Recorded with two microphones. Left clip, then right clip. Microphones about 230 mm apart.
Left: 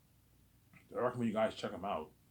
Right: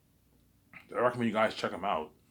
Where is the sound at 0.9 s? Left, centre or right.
Right.